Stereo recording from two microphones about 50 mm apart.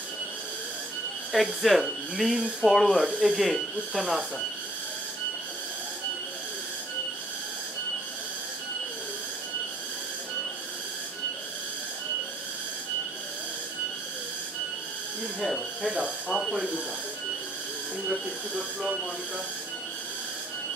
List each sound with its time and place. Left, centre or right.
1.3 s speech: centre
18.0 s speech: centre